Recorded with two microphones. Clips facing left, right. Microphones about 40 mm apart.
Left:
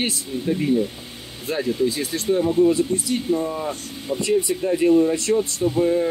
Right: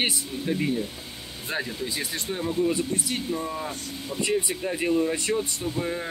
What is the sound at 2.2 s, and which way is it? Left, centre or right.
Speech, centre.